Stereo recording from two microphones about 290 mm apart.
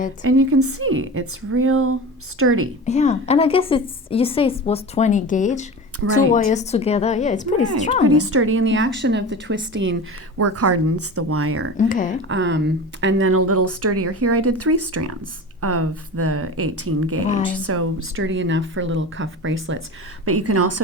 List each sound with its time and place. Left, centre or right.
0.3 s speech: right
2.8 s a woman's voice: left
8.0 s speech: right
10.3 s speech: right
11.8 s a woman's voice: left
12.3 s speech: right